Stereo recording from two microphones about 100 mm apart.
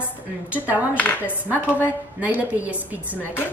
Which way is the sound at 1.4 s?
15° right (ahead or behind).